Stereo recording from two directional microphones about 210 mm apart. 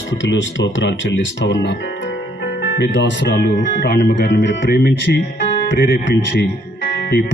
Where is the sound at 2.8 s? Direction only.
55° left (ahead or behind).